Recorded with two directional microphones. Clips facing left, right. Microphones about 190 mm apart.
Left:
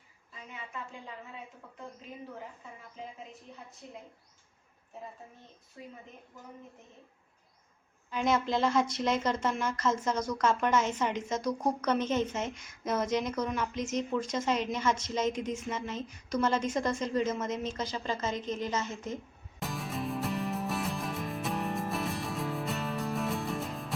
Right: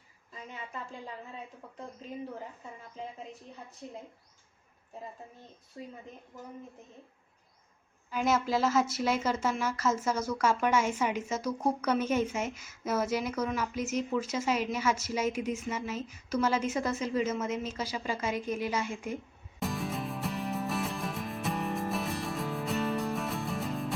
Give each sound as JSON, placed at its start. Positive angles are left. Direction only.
{"t": 0.4, "sound": "a woman's voice", "side_deg": -35}
{"t": 5.8, "sound": "a woman's voice", "side_deg": -35}
{"t": 8.1, "sound": "a woman's voice", "side_deg": -5}
{"t": 19.5, "sound": "music", "side_deg": 0}